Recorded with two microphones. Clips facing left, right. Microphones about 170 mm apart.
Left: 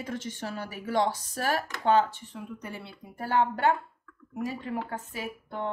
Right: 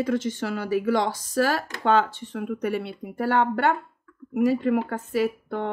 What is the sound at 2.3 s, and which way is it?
Speech, 75° right (ahead or behind).